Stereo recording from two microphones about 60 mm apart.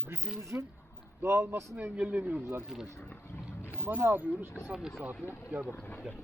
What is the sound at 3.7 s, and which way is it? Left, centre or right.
Speech, right.